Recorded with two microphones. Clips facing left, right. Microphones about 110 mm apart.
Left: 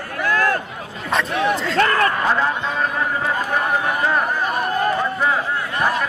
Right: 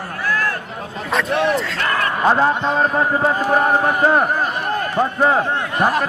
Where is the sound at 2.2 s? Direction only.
35° right (ahead or behind).